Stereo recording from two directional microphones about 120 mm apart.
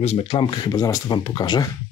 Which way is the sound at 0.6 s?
30° left (ahead or behind).